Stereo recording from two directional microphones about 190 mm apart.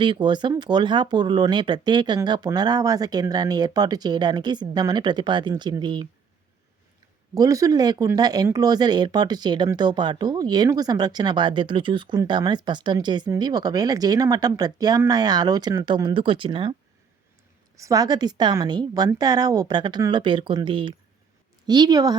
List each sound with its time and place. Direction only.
0.0 s speech: 25° right (ahead or behind)
7.3 s speech: 20° right (ahead or behind)
17.7 s speech: 20° right (ahead or behind)